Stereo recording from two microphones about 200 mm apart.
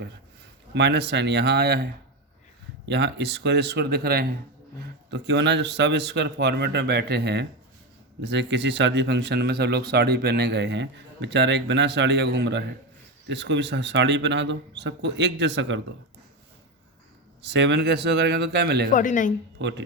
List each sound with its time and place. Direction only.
0.7 s speech: 60° right (ahead or behind)
17.5 s speech: 60° right (ahead or behind)
18.9 s a woman's voice: 40° left (ahead or behind)
19.5 s speech: 65° right (ahead or behind)